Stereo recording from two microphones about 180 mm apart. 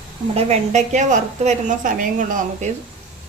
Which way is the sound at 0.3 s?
35° right (ahead or behind).